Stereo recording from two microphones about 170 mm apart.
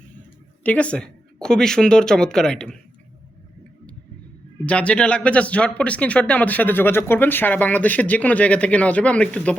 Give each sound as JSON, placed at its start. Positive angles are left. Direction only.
{"t": 0.6, "sound": "speech", "side_deg": 10}
{"t": 4.6, "sound": "speech", "side_deg": 10}